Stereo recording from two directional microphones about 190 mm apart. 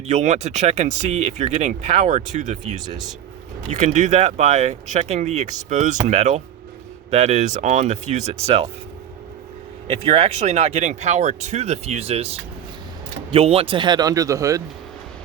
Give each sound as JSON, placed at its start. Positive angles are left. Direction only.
{"t": 0.1, "sound": "speech", "side_deg": -35}
{"t": 9.8, "sound": "speech", "side_deg": -35}